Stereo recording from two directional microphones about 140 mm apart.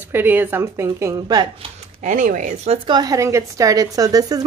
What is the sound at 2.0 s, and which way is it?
Speech, 65° right (ahead or behind).